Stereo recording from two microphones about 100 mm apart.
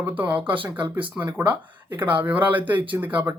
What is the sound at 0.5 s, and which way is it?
Speech, 55° right (ahead or behind).